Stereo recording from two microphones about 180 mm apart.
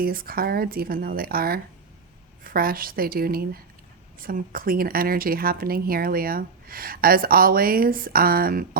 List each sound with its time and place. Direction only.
0.0 s speech: 55° right (ahead or behind)